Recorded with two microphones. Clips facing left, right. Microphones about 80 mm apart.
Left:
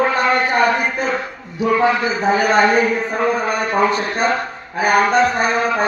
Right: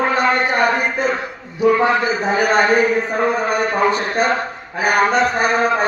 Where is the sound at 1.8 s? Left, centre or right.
Right.